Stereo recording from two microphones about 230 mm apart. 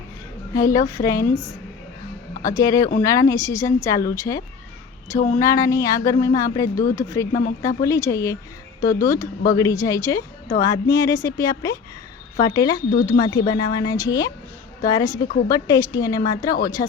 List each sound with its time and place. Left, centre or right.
0.5 s a woman's voice: centre
2.6 s a woman's voice: centre
15.2 s a woman's voice: left
15.4 s a woman's voice: centre